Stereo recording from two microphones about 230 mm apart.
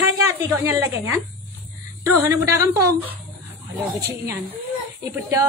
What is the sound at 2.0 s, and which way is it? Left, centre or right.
A woman's voice, centre.